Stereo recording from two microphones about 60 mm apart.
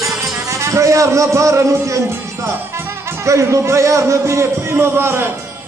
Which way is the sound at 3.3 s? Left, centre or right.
Right.